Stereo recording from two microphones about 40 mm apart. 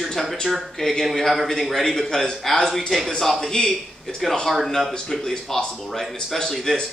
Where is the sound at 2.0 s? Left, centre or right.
Centre.